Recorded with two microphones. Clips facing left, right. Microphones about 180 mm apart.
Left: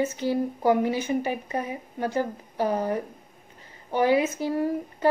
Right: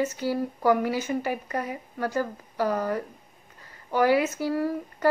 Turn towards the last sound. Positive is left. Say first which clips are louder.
# left 1 dB
turn(degrees=20)  # may be behind; listen again after turning